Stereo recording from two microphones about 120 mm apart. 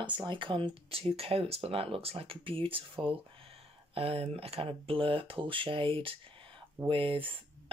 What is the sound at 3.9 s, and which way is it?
Speech, 55° right (ahead or behind).